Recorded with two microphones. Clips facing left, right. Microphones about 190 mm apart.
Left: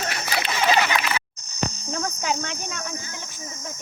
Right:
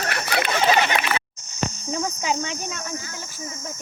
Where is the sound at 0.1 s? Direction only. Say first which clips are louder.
Right 4 dB; 55° right (ahead or behind).